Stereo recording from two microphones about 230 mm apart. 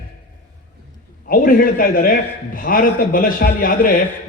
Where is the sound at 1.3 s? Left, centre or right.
Left.